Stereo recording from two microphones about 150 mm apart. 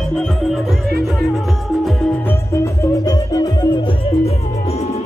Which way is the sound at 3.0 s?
25° left (ahead or behind).